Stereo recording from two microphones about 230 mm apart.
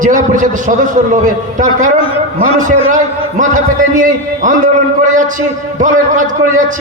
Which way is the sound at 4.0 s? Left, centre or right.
Right.